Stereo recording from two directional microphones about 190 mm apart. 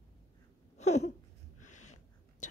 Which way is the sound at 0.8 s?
35° left (ahead or behind).